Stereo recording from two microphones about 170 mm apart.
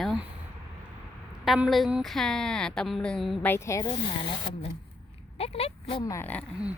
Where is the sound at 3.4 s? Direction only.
15° left (ahead or behind).